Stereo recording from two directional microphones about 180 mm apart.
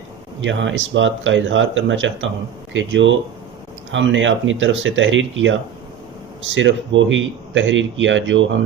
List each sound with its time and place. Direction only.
0.4 s speech: 90° right